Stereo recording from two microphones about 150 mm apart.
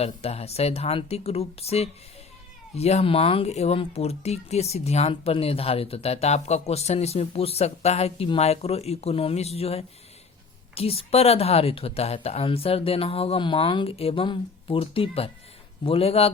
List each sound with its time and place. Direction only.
0.0 s a woman's voice: 45° left (ahead or behind)